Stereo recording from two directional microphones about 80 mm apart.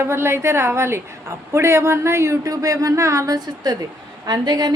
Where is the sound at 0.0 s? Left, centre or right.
Right.